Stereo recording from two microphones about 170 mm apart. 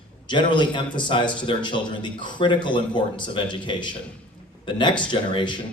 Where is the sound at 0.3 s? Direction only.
25° left (ahead or behind).